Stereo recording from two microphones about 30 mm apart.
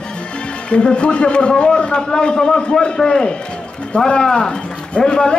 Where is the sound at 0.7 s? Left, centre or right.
Left.